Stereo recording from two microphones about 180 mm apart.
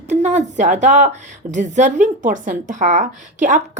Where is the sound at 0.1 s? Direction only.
40° right (ahead or behind).